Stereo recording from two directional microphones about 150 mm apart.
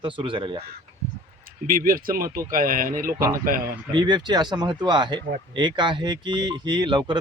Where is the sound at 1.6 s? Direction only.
70° right (ahead or behind).